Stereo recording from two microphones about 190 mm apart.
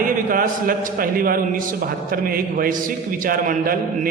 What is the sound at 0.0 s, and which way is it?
A man's voice, 45° right (ahead or behind).